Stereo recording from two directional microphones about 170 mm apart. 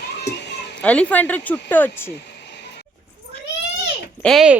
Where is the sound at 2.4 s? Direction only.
85° left.